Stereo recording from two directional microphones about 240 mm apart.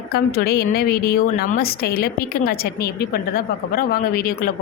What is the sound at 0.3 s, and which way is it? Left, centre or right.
A woman's voice, left.